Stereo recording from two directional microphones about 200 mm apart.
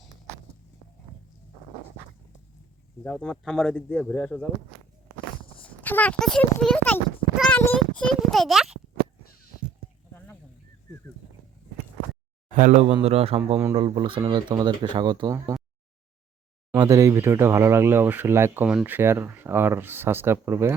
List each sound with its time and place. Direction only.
3.0 s speech: 5° left (ahead or behind)
5.6 s a child's voice: 10° left (ahead or behind)
7.3 s a sound: centre (ahead or behind)
12.5 s a man's voice: 40° right (ahead or behind); by 15.5 s 20° right (ahead or behind)
16.7 s speech: 15° right (ahead or behind)